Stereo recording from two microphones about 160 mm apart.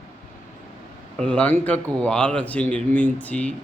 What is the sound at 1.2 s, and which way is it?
Speech, 5° left (ahead or behind).